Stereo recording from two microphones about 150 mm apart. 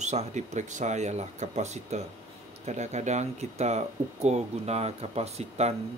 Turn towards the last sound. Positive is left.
turn(degrees=-45)  # may be behind; listen again after turning